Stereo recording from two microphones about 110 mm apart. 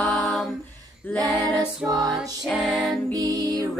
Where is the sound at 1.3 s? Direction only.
15° left (ahead or behind).